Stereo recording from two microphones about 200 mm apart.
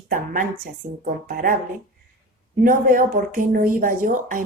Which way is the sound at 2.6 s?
40° right (ahead or behind).